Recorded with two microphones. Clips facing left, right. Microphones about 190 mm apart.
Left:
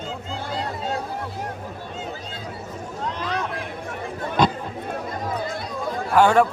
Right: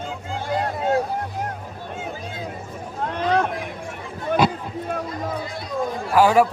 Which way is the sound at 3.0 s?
55° right (ahead or behind).